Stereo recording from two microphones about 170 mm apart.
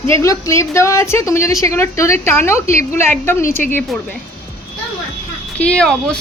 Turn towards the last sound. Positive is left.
turn(degrees=5)  # may be behind; listen again after turning